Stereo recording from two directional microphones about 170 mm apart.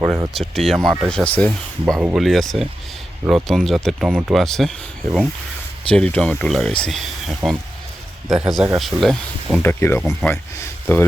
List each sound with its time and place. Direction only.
0.0 s speech: 15° right (ahead or behind)
0.3 s speech: centre (ahead or behind)
2.0 s speech: 5° right (ahead or behind)
5.9 s speech: 5° left (ahead or behind)
9.6 s speech: 15° left (ahead or behind)